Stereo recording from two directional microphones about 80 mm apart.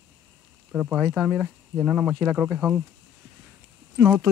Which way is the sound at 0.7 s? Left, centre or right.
Centre.